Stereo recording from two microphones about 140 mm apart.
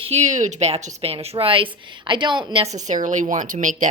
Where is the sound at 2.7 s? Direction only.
60° right (ahead or behind).